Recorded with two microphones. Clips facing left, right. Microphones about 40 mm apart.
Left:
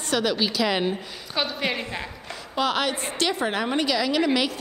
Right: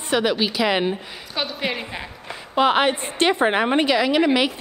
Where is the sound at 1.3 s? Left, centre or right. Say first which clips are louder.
Right 1 dB; centre.